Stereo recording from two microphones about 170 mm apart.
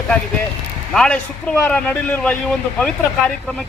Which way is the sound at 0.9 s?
5° left (ahead or behind).